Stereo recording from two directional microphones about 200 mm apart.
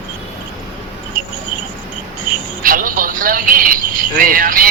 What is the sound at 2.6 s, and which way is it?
Cricket, 45° right (ahead or behind).